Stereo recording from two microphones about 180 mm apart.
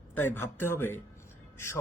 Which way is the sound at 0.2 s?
10° left (ahead or behind).